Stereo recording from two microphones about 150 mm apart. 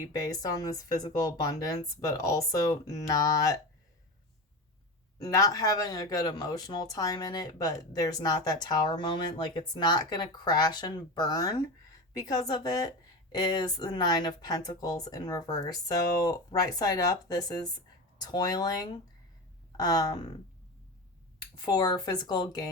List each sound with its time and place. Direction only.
0.2 s speech: 25° left (ahead or behind)
5.2 s speech: 25° left (ahead or behind)
21.3 s speech: 25° left (ahead or behind)